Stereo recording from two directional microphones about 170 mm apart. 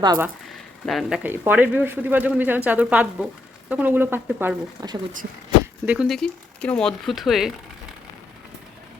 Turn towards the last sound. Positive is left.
turn(degrees=0)  # may be behind; listen again after turning